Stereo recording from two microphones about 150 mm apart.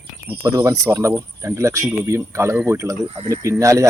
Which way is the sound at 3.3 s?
20° right (ahead or behind).